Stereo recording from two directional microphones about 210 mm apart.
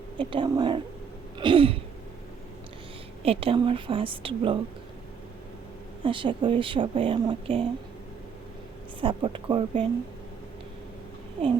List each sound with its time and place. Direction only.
0.2 s speech: 25° right (ahead or behind)
3.2 s speech: 25° right (ahead or behind)
6.0 s speech: 25° right (ahead or behind)
9.0 s speech: 25° right (ahead or behind)